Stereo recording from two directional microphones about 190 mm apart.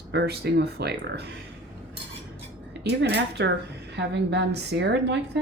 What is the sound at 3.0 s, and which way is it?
A woman's voice, 65° right (ahead or behind).